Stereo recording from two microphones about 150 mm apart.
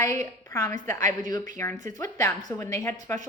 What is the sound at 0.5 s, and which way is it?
A woman's voice, 20° left (ahead or behind).